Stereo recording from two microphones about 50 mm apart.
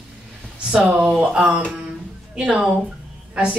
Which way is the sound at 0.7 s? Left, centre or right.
Right.